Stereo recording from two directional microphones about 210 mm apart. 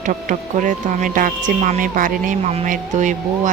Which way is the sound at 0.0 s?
35° right (ahead or behind).